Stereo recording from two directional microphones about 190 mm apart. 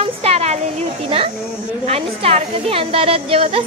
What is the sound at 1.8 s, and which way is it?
A woman's voice, 30° right (ahead or behind).